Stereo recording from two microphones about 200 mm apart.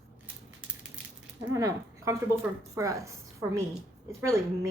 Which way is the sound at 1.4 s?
15° right (ahead or behind).